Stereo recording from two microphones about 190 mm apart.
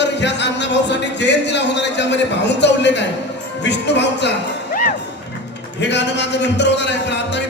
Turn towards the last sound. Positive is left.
turn(degrees=65)  # may be behind; listen again after turning